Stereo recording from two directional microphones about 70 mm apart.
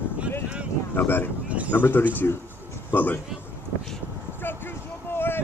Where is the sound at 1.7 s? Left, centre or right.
Left.